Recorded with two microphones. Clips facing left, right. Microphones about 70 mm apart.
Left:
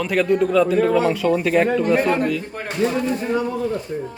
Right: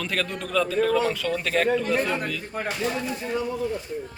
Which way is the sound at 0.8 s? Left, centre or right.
Left.